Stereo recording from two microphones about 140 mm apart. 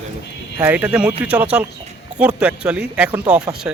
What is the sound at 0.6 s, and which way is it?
A man's voice, 10° right (ahead or behind).